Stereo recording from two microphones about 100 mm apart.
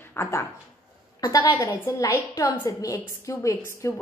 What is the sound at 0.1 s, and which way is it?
A woman's voice, 30° left (ahead or behind).